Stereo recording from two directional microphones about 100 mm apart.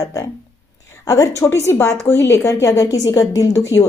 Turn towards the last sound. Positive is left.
turn(degrees=30)  # may be behind; listen again after turning